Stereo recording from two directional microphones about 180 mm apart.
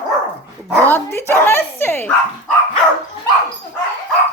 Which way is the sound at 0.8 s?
15° left (ahead or behind).